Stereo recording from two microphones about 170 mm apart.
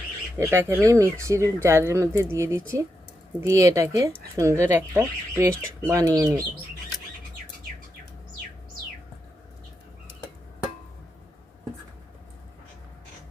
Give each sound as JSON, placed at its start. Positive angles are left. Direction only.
{"t": 0.3, "sound": "speech", "side_deg": -15}